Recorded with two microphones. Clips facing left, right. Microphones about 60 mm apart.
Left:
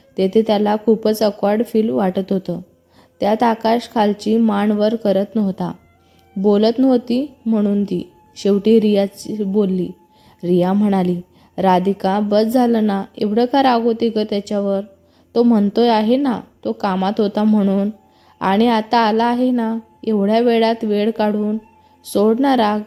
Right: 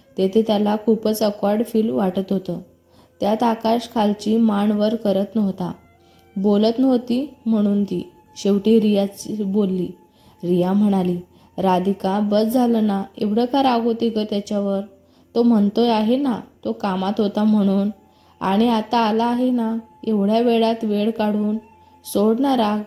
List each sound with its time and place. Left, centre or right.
0.2 s speech: left
7.4 s speech: left
7.8 s speech: left
15.7 s speech: left
17.4 s speech: left
18.3 s a woman's voice: left